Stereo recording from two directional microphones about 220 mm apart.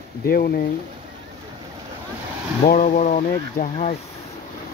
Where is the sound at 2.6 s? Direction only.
35° left (ahead or behind).